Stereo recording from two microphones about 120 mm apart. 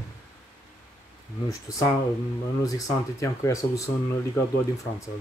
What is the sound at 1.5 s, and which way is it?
Speech, 25° left (ahead or behind).